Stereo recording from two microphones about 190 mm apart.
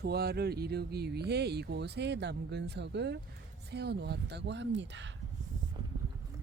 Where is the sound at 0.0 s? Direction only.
55° right (ahead or behind).